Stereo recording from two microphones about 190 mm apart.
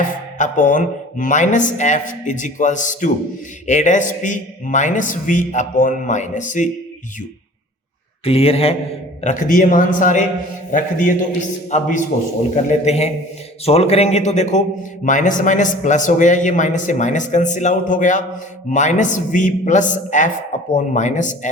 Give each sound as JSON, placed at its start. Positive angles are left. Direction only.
{"t": 0.3, "sound": "a man's voice", "side_deg": 40}
{"t": 8.2, "sound": "a man's voice", "side_deg": 30}
{"t": 9.2, "sound": "a man's voice", "side_deg": 40}